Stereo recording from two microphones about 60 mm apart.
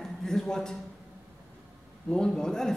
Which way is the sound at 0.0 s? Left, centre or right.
Centre.